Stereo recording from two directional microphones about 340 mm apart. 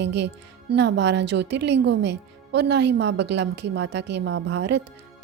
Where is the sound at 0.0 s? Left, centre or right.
Right.